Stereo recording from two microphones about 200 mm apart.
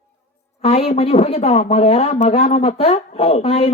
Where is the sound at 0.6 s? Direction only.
30° left (ahead or behind).